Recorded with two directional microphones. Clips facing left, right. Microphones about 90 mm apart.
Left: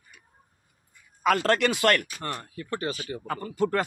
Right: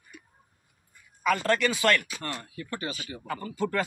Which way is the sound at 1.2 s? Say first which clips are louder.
Left 2 dB; 75° left (ahead or behind).